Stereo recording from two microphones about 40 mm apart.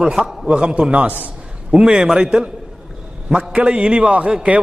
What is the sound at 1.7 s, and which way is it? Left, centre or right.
Speech, right.